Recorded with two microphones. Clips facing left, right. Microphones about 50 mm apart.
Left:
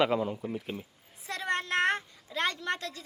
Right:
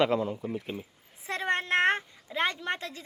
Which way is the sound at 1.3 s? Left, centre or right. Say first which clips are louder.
Right 3 dB; right.